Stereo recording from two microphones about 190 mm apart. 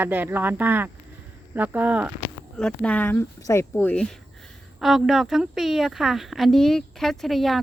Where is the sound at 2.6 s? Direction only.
5° left (ahead or behind).